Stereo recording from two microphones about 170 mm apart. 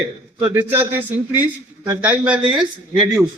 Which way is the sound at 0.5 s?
10° right (ahead or behind).